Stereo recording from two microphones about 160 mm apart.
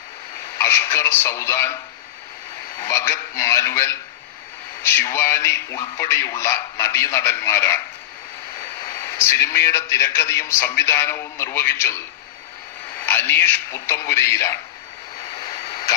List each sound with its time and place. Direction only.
0.6 s a man's voice: 15° left (ahead or behind)
2.8 s a man's voice: 15° left (ahead or behind)
9.1 s a man's voice: 15° left (ahead or behind)
13.1 s a man's voice: 10° left (ahead or behind)